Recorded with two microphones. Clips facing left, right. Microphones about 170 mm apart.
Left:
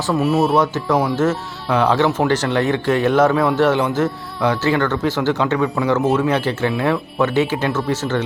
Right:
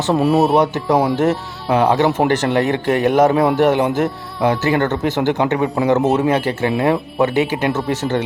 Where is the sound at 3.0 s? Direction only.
15° right (ahead or behind).